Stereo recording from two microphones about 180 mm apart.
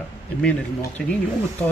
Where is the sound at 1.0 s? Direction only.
5° left (ahead or behind).